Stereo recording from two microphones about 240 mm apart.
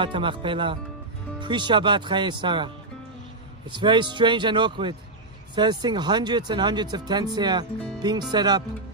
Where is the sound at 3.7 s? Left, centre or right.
Centre.